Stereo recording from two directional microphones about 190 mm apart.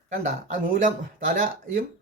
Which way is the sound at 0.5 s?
45° right (ahead or behind).